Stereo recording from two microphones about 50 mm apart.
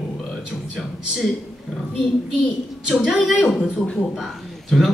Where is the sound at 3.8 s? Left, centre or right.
Centre.